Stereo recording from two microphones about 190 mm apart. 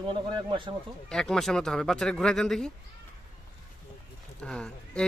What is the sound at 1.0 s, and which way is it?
Speech, 5° left (ahead or behind).